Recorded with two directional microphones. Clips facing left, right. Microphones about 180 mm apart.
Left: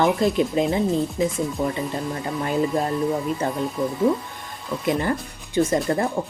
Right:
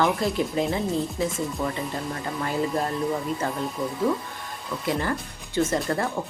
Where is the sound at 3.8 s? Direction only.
20° left (ahead or behind).